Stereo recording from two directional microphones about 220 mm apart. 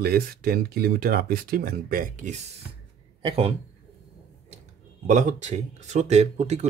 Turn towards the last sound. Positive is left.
turn(degrees=-30)  # may be behind; listen again after turning